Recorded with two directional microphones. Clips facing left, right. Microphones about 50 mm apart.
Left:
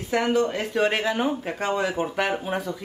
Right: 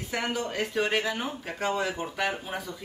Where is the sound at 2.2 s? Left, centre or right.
Centre.